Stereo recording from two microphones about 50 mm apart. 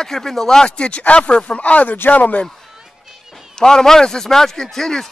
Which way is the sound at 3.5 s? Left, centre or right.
Centre.